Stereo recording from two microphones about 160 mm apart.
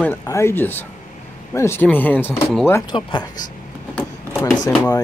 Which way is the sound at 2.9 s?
30° left (ahead or behind).